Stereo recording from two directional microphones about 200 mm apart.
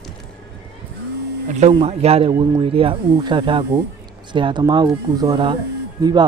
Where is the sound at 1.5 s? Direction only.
35° right (ahead or behind).